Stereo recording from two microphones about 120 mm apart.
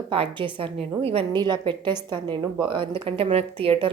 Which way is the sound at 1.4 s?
40° right (ahead or behind).